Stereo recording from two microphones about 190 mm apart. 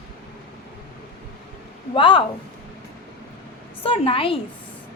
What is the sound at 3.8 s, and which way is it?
Speech, 30° left (ahead or behind).